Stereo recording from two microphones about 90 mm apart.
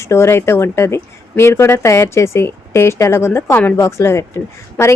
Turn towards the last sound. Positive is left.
turn(degrees=30)  # may be behind; listen again after turning